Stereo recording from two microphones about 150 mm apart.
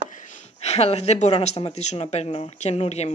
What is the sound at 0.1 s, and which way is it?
Speech, 55° left (ahead or behind).